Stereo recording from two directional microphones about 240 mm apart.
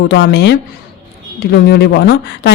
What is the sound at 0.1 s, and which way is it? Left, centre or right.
Speech, left.